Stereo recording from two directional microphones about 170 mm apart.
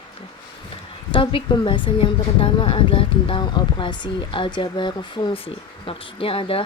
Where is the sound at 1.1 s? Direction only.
30° left (ahead or behind).